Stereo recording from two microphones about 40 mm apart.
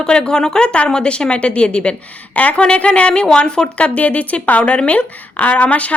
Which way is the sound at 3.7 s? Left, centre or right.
Left.